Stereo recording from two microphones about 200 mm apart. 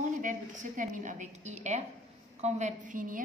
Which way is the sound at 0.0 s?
40° right (ahead or behind).